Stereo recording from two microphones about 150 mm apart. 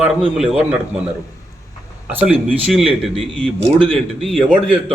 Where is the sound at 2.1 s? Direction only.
10° right (ahead or behind).